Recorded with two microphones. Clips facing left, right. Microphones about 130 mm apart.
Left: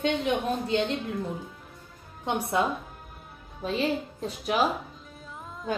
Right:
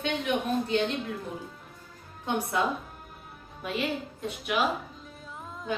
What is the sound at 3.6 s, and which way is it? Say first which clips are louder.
A woman's voice: left 4 dB; 30° left (ahead or behind).